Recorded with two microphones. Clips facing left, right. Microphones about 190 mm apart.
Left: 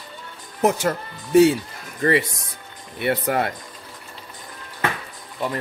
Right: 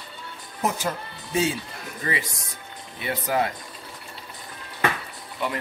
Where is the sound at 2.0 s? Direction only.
55° left (ahead or behind).